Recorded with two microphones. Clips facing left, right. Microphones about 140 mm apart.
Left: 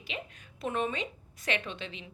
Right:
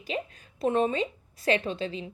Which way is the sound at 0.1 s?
35° right (ahead or behind).